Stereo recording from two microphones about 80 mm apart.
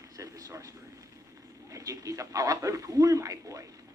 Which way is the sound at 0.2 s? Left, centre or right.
Right.